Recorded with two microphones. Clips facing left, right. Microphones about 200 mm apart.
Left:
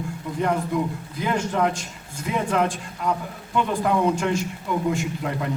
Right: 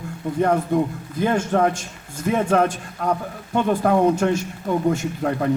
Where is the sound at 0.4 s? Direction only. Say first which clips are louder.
Right 4 dB; 45° right (ahead or behind).